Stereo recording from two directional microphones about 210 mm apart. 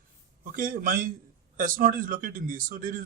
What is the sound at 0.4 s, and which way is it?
A man's voice, 40° right (ahead or behind).